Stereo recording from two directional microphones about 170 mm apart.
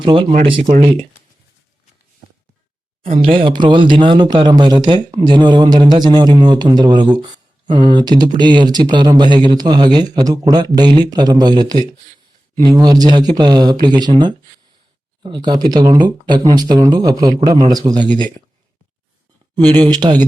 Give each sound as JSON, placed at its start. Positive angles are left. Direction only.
{"t": 0.0, "sound": "speech", "side_deg": -30}
{"t": 3.0, "sound": "speech", "side_deg": -30}
{"t": 19.8, "sound": "speech", "side_deg": -25}